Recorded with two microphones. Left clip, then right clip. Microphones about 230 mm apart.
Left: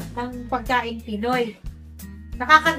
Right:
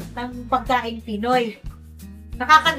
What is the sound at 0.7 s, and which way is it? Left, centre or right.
A woman's voice, centre.